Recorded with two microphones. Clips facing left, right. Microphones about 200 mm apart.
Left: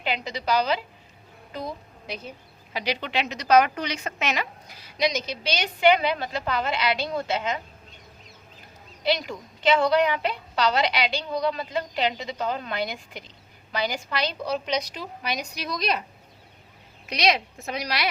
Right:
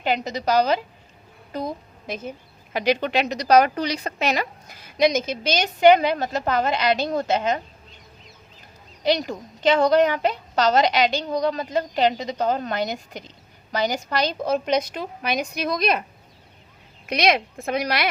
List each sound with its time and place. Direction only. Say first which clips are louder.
0.0 s a woman's voice: right 5 dB; 45° right (ahead or behind)
9.0 s a woman's voice: right 4 dB; 45° right (ahead or behind)
17.1 s a woman's voice: right 3 dB; 50° right (ahead or behind)